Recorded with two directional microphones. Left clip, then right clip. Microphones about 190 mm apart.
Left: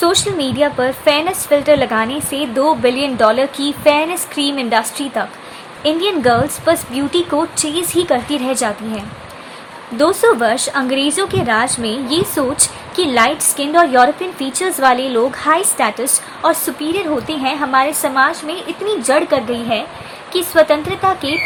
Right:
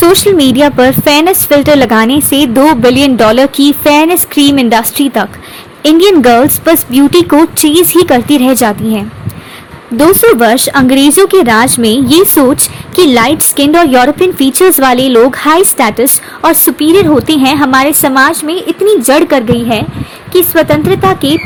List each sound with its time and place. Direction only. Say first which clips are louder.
0.0 s a woman's voice: right 10 dB; 40° right (ahead or behind)
10.0 s a woman's voice: right 7 dB; 40° right (ahead or behind)